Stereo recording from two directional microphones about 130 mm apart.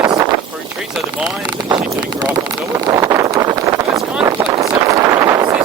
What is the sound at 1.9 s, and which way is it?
Speech, 30° right (ahead or behind).